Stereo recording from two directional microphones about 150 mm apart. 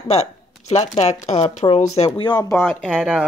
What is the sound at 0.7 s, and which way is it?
Speech, 45° left (ahead or behind).